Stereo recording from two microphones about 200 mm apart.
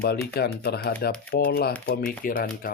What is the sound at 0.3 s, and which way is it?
Speech, 50° left (ahead or behind).